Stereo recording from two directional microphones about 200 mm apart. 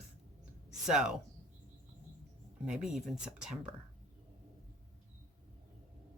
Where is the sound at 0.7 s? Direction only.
5° right (ahead or behind).